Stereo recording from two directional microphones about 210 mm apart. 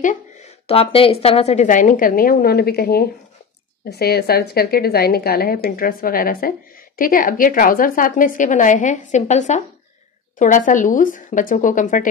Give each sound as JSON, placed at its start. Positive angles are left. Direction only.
{"t": 0.7, "sound": "a woman's voice", "side_deg": 25}